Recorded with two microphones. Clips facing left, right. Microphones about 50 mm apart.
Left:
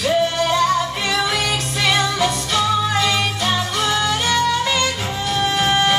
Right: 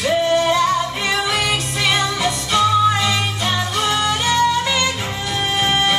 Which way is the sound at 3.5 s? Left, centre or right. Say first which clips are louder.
Right 2 dB; centre.